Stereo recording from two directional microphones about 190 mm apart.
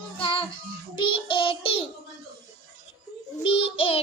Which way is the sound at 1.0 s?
25° left (ahead or behind).